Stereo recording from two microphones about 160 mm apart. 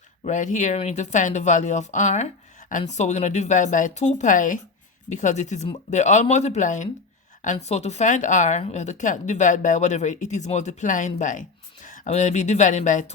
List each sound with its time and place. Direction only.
0.3 s a woman's voice: 50° left (ahead or behind)